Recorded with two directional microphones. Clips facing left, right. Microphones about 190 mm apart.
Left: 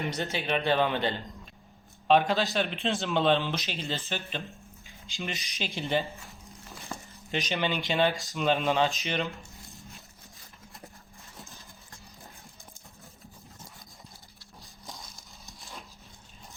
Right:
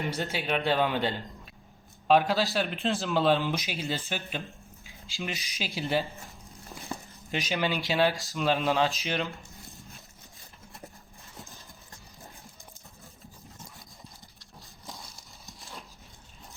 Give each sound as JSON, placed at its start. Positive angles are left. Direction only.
{"t": 0.0, "sound": "a man's voice", "side_deg": -5}
{"t": 7.3, "sound": "a man's voice", "side_deg": -5}
{"t": 15.4, "sound": "horse", "side_deg": 0}